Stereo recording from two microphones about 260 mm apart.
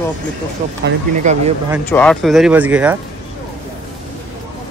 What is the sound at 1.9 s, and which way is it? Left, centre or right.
Speech, centre.